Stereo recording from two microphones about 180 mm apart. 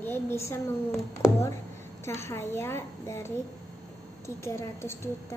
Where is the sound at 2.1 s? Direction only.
15° left (ahead or behind).